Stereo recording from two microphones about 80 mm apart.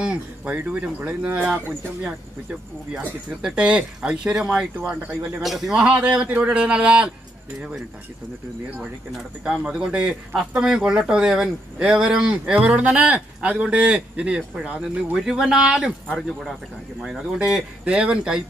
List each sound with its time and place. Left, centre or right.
0.0 s speech: centre
3.3 s speech: centre
5.4 s speech: centre
9.1 s speech: centre